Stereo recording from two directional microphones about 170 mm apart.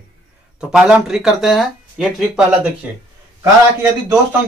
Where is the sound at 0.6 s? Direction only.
5° right (ahead or behind).